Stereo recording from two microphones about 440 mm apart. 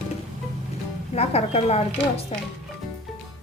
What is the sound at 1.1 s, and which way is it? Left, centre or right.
Speech, centre.